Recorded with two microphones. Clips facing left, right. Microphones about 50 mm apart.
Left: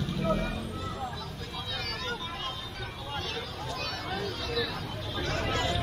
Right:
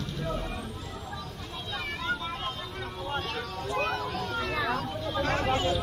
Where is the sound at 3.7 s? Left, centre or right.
Right.